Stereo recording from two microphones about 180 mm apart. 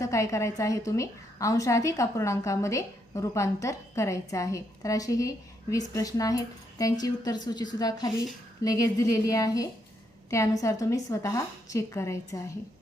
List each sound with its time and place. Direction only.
0.0 s a woman's voice: 15° left (ahead or behind)